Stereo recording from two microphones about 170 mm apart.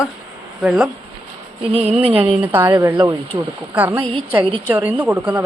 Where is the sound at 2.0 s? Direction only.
35° right (ahead or behind).